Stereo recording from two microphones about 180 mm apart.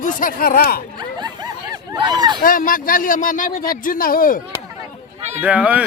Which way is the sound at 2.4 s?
50° left (ahead or behind).